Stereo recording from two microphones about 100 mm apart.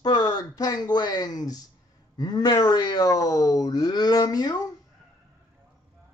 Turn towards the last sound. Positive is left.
turn(degrees=40)  # may be behind; listen again after turning